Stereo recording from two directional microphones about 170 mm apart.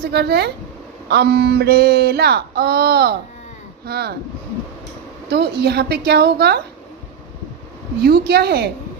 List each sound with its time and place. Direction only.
0.0 s speech: 75° right (ahead or behind)
5.3 s speech: 75° right (ahead or behind)
8.0 s speech: 70° right (ahead or behind)